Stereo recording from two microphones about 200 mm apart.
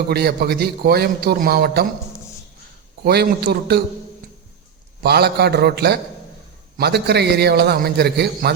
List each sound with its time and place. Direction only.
0.1 s a man's voice: 50° right (ahead or behind)
3.0 s a man's voice: 55° right (ahead or behind)
5.0 s a man's voice: 55° right (ahead or behind)